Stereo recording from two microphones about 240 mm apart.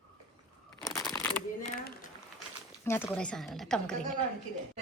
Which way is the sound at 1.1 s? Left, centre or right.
Centre.